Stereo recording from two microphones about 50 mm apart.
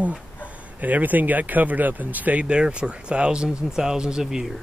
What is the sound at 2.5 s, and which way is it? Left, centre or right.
Speech, right.